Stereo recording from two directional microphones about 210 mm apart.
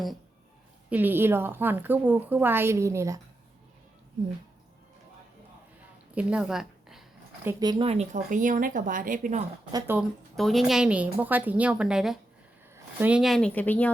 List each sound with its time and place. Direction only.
0.9 s a woman's voice: 10° right (ahead or behind)
6.1 s a woman's voice: 5° right (ahead or behind)
7.4 s speech: 20° right (ahead or behind); by 9.4 s 40° right (ahead or behind)
9.7 s a woman's voice: 10° right (ahead or behind)
10.3 s a woman's voice: centre (ahead or behind)